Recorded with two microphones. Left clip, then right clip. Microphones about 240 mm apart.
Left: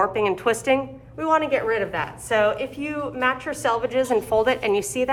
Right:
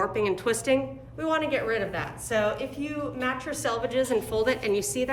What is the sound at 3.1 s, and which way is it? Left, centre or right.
A woman's voice, centre.